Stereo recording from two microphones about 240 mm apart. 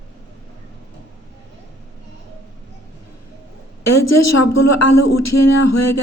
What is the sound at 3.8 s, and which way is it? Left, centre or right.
Speech, left.